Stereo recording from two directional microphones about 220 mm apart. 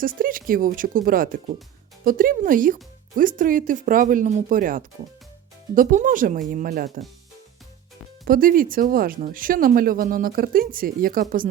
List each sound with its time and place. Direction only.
0.0 s speech: 40° right (ahead or behind)
8.2 s speech: 40° right (ahead or behind)